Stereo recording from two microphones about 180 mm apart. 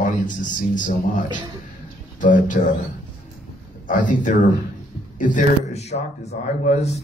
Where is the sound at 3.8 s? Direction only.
45° left (ahead or behind).